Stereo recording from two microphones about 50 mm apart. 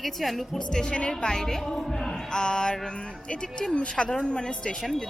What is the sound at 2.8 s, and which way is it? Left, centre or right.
Speech, centre.